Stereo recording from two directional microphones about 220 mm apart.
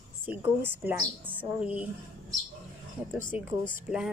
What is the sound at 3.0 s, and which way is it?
Speech, 10° right (ahead or behind).